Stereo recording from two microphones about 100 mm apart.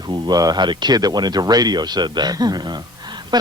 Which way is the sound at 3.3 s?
45° right (ahead or behind).